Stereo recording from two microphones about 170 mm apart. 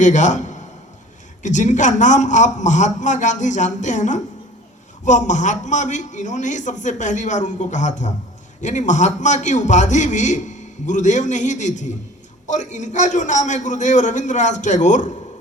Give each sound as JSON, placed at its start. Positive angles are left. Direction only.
{"t": 0.0, "sound": "a man's voice", "side_deg": 45}